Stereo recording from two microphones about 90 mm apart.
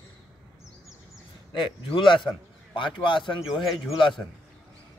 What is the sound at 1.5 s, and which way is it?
A man's voice, 70° left (ahead or behind).